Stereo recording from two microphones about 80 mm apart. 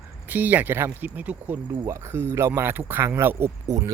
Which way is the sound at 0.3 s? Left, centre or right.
Right.